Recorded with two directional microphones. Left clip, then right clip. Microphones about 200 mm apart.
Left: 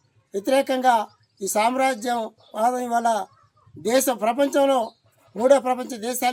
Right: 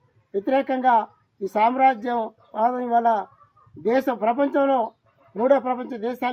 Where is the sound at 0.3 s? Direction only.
20° left (ahead or behind).